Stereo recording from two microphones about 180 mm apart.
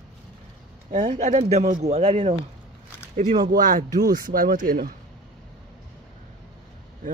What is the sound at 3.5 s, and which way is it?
Speech, 50° right (ahead or behind).